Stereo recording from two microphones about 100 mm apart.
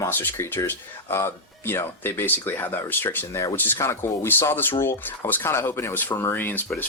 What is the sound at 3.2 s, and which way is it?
Speech, 30° left (ahead or behind).